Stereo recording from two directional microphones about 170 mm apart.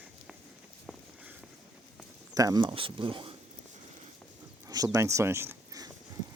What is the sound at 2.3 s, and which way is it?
Speech, 20° right (ahead or behind).